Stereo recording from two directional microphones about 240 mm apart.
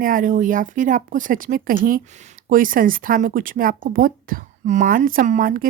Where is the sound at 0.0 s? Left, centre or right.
Right.